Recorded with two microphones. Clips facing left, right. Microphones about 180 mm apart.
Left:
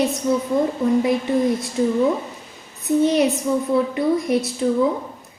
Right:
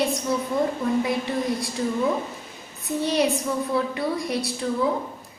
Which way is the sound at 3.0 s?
20° left (ahead or behind).